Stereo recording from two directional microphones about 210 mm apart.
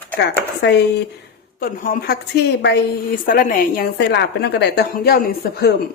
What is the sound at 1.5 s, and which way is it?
A woman's voice, 40° left (ahead or behind).